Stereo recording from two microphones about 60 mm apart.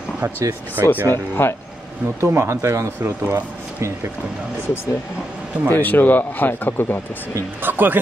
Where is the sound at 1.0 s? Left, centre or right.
Left.